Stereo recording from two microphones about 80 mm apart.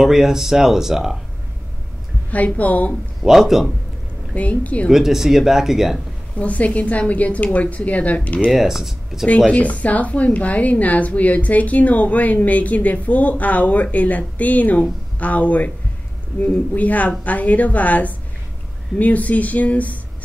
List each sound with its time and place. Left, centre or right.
0.0 s speech: centre
2.3 s a woman's voice: centre
3.2 s speech: centre
4.3 s a woman's voice: centre
4.9 s speech: centre
6.4 s a woman's voice: centre
8.5 s speech: centre
9.5 s a woman's voice: centre